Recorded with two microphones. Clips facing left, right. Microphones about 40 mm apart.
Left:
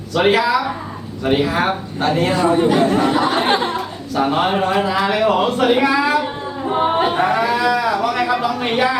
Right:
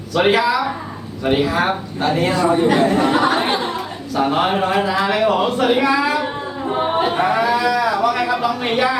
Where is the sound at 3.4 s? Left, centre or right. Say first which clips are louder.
Left 3 dB; left.